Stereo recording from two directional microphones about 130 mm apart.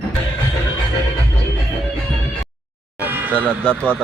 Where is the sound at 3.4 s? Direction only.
10° left (ahead or behind).